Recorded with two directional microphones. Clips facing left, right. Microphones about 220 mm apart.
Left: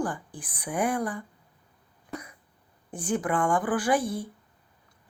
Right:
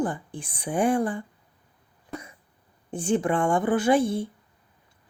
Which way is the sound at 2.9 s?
25° right (ahead or behind).